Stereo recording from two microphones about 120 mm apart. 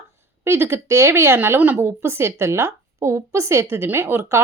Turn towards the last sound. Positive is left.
turn(degrees=-20)  # may be behind; listen again after turning